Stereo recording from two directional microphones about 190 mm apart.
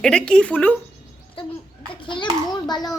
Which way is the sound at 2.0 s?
25° left (ahead or behind).